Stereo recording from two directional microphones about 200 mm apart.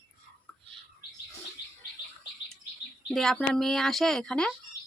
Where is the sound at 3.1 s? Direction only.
Centre (ahead or behind).